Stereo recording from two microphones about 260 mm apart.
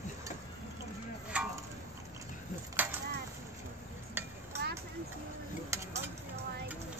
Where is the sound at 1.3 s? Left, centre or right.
Centre.